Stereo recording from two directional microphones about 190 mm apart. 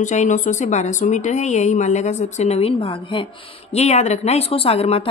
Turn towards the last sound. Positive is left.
turn(degrees=30)  # may be behind; listen again after turning